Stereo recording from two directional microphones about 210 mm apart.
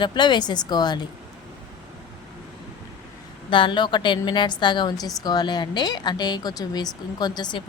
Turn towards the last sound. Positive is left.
turn(degrees=20)  # may be behind; listen again after turning